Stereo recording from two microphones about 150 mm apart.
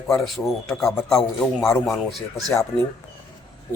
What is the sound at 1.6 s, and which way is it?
Speech, 15° left (ahead or behind).